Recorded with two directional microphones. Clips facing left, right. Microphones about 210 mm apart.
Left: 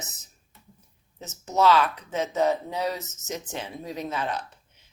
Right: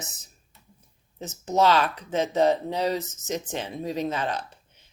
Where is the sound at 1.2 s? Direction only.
30° right (ahead or behind).